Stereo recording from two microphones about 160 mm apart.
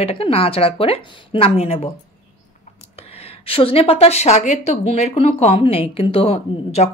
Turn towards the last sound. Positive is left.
turn(degrees=40)  # may be behind; listen again after turning